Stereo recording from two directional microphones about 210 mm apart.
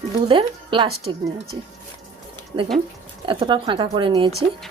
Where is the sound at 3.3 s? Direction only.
20° right (ahead or behind).